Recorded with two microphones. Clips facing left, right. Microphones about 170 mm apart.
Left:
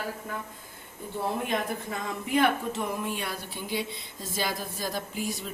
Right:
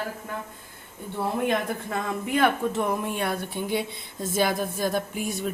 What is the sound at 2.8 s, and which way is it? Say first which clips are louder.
Speech: right 5 dB; 55° right (ahead or behind).